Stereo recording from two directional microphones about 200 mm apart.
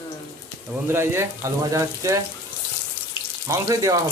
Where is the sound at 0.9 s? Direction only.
10° right (ahead or behind).